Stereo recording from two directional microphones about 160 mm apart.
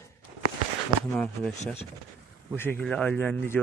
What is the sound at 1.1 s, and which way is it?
Speech, 5° left (ahead or behind).